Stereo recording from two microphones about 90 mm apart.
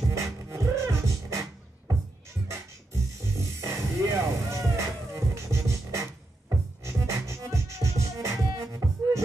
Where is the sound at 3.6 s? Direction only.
30° right (ahead or behind).